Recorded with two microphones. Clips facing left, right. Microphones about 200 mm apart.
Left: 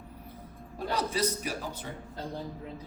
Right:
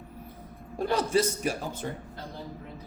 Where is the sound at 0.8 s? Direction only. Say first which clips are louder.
Right 5 dB; 50° right (ahead or behind).